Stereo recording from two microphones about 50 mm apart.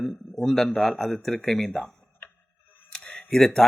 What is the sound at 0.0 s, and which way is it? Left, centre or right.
Speech, centre.